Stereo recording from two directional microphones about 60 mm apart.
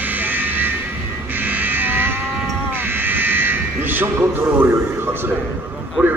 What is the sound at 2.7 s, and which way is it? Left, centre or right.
Buzzer, right.